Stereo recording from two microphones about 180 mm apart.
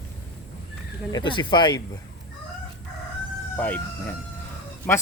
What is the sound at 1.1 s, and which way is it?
Speech, 25° left (ahead or behind).